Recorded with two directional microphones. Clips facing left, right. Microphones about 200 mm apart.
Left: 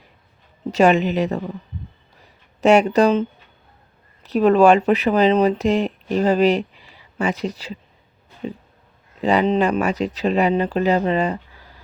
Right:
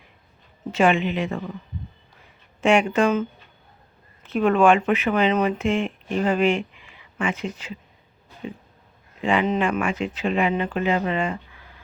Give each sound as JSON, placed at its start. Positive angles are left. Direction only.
{"t": 0.7, "sound": "speech", "side_deg": 40}
{"t": 9.2, "sound": "speech", "side_deg": 40}